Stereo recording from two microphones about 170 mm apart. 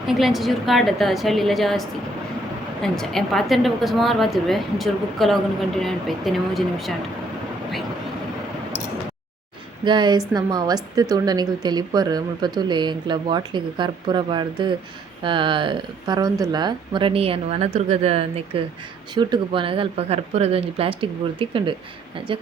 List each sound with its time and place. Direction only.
0.1 s a woman's voice: centre (ahead or behind)
2.8 s a woman's voice: centre (ahead or behind)
9.8 s speech: 25° right (ahead or behind)
19.1 s speech: 25° right (ahead or behind)